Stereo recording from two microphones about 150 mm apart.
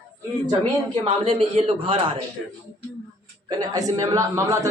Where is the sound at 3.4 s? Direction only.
25° right (ahead or behind).